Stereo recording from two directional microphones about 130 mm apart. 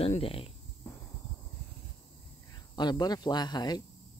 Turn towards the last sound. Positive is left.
turn(degrees=30)  # may be behind; listen again after turning